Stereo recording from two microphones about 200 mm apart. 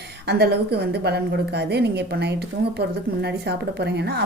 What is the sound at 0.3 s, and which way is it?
A woman's voice, 55° right (ahead or behind).